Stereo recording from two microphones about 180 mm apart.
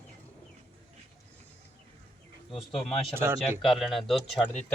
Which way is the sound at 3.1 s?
15° right (ahead or behind).